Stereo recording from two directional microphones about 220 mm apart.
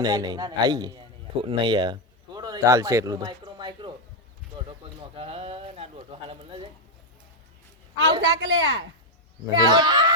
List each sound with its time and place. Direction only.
0.0 s a man's voice: 20° right (ahead or behind)
8.2 s speech: 60° right (ahead or behind)
9.6 s a child's voice: 20° right (ahead or behind)